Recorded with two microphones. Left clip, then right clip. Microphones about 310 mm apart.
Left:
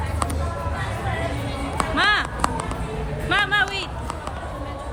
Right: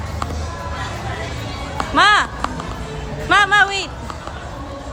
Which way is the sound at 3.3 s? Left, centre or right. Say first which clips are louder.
Right 7 dB; centre.